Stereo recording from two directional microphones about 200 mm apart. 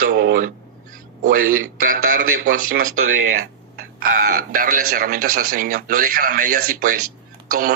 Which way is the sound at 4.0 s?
45° right (ahead or behind).